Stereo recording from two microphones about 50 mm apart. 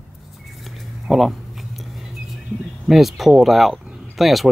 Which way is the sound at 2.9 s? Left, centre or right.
Centre.